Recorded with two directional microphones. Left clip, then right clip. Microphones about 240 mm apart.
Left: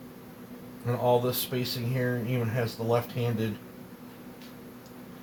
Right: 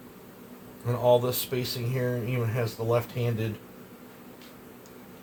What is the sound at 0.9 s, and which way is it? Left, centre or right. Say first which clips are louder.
Speech: right 2 dB; right.